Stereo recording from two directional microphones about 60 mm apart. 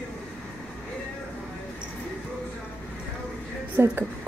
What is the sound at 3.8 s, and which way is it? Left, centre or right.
Speech, right.